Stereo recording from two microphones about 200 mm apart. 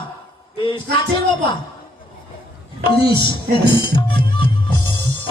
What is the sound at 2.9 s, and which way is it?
Music, 25° left (ahead or behind).